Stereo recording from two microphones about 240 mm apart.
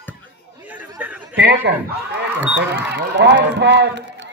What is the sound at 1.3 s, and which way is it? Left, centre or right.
A man's voice, right.